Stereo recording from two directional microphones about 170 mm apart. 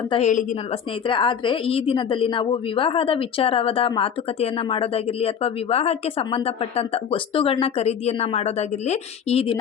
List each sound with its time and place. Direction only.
0.1 s a woman's voice: 45° left (ahead or behind)
1.0 s a woman's voice: 30° left (ahead or behind)